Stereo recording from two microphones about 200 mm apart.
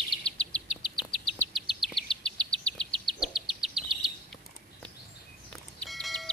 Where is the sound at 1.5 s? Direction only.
Centre (ahead or behind).